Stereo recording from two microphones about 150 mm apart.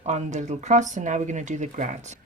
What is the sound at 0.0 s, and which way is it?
Speech, 50° right (ahead or behind).